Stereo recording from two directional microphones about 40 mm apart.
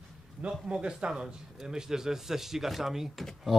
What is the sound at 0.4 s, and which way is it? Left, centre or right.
Speech, right.